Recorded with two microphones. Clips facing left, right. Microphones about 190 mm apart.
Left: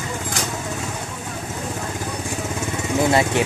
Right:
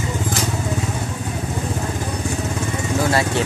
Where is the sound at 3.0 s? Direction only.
20° left (ahead or behind).